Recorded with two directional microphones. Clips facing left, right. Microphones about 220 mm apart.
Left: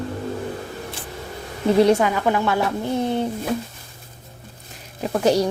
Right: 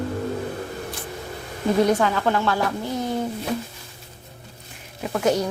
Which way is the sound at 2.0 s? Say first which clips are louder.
Left 1 dB; 15° left (ahead or behind).